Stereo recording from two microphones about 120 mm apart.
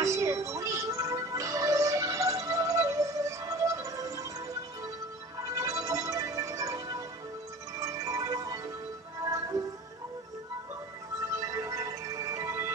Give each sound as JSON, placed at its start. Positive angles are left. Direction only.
{"t": 0.0, "sound": "music", "side_deg": -25}
{"t": 5.5, "sound": "music", "side_deg": -25}
{"t": 11.4, "sound": "music", "side_deg": -25}